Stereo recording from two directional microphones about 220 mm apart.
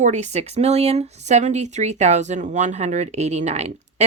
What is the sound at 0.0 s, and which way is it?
Speech, 30° right (ahead or behind).